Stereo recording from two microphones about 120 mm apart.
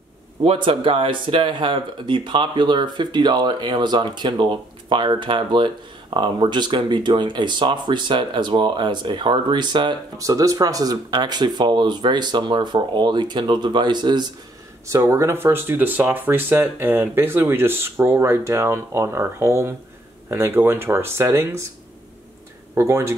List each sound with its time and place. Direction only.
0.5 s speech: 45° right (ahead or behind)
14.9 s speech: 25° right (ahead or behind)
22.8 s speech: 20° right (ahead or behind)